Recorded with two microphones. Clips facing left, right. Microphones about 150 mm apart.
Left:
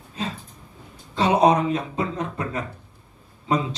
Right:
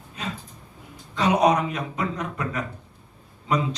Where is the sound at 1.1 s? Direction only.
30° left (ahead or behind).